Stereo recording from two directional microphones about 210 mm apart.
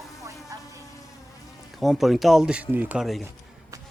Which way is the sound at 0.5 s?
15° right (ahead or behind).